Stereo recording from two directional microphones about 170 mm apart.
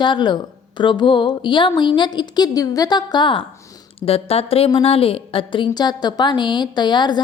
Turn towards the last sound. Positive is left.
turn(degrees=25)  # may be behind; listen again after turning